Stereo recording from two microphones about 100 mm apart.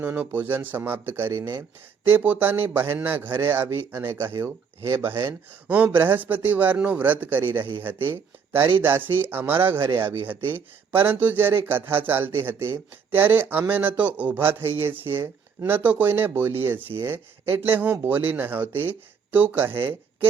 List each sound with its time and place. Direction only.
0.0 s a man's voice: 20° right (ahead or behind)
1.3 s speech: 35° right (ahead or behind)
2.0 s a man's voice: 20° right (ahead or behind)